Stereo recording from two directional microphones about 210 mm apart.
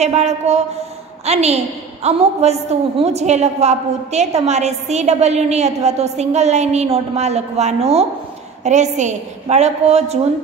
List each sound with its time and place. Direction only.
0.0 s a woman's voice: 30° right (ahead or behind)